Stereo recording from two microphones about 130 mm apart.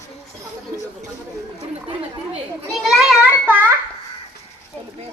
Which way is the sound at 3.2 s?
15° right (ahead or behind).